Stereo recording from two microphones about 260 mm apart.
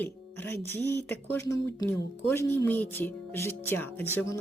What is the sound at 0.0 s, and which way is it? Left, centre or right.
A woman's voice, centre.